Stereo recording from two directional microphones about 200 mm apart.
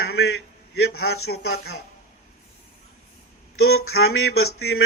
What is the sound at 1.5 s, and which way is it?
Speech, 50° left (ahead or behind).